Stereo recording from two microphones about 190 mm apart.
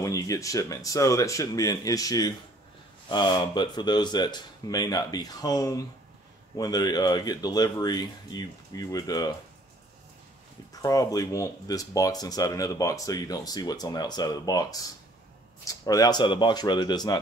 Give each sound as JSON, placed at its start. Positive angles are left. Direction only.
{"t": 0.0, "sound": "speech", "side_deg": 15}
{"t": 10.7, "sound": "speech", "side_deg": 20}